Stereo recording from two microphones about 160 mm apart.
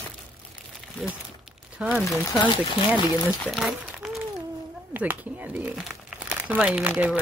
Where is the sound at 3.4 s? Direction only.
Centre (ahead or behind).